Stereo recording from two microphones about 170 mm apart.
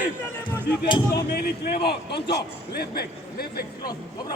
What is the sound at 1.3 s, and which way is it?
A man's voice, 65° left (ahead or behind).